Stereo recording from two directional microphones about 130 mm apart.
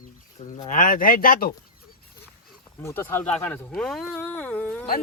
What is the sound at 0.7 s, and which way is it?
Speech, 90° left.